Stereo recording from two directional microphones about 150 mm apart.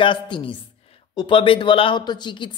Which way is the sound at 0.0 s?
35° left (ahead or behind).